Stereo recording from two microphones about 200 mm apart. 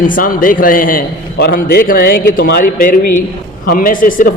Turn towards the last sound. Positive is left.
turn(degrees=45)  # may be behind; listen again after turning